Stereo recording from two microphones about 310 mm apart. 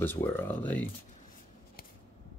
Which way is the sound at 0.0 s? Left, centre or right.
Centre.